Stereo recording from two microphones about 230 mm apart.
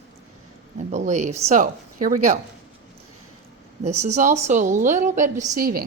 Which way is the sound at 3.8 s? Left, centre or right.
Right.